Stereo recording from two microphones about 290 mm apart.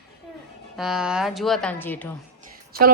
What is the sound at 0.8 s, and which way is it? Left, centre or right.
Speech, centre.